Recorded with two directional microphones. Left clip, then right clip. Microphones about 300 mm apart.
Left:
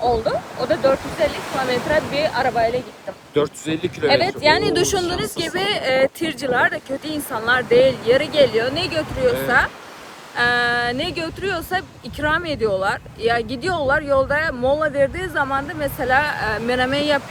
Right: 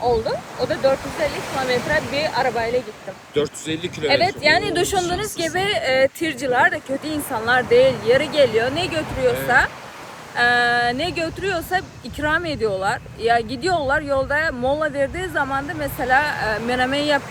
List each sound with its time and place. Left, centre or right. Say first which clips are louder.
0.0 s speech: left 1 dB; centre
3.3 s speech: left 2 dB; centre
4.1 s speech: even; centre